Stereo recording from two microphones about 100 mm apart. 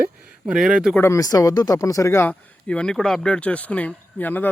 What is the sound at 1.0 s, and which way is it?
Speech, 30° left (ahead or behind).